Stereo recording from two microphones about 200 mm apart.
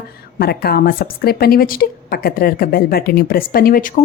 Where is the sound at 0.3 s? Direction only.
50° left (ahead or behind).